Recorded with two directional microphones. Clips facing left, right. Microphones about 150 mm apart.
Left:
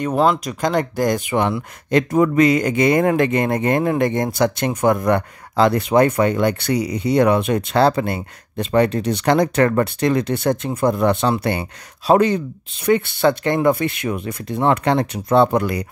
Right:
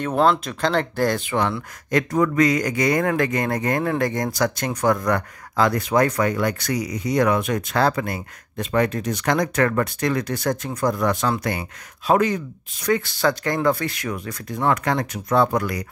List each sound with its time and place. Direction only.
0.0 s speech: 5° left (ahead or behind); by 15.8 s 25° left (ahead or behind)